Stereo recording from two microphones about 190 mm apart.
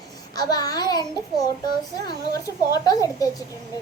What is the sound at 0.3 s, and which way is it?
A child's voice, 20° left (ahead or behind).